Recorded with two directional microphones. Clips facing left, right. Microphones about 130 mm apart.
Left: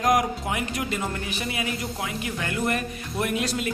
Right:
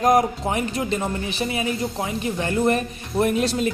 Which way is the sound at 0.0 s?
30° right (ahead or behind).